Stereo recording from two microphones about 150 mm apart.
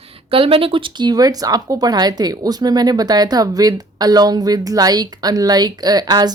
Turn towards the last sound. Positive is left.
turn(degrees=-25)  # may be behind; listen again after turning